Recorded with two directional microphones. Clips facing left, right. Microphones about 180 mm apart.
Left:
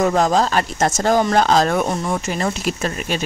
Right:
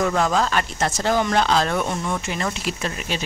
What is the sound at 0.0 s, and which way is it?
Speech, 40° left (ahead or behind).